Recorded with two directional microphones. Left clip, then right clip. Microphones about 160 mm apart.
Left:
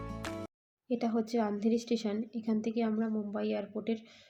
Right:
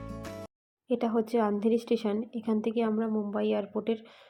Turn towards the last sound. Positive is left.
turn(degrees=-25)  # may be behind; listen again after turning